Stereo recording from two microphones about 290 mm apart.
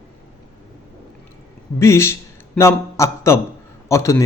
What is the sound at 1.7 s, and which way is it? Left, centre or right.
A man's voice, centre.